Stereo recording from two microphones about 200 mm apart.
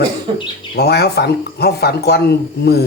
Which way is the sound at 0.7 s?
55° left (ahead or behind).